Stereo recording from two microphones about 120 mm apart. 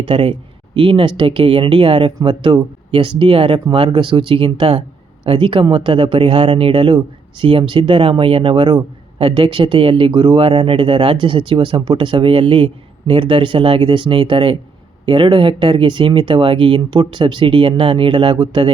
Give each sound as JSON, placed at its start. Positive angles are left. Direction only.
{"t": 0.0, "sound": "speech", "side_deg": -50}